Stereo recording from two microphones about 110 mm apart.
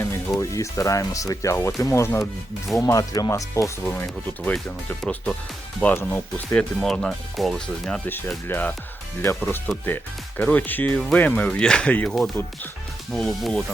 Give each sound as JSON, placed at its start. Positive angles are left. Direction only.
{"t": 0.0, "sound": "speech", "side_deg": 25}
{"t": 5.0, "sound": "speech", "side_deg": 10}
{"t": 8.4, "sound": "speech", "side_deg": 20}
{"t": 13.1, "sound": "speech", "side_deg": 5}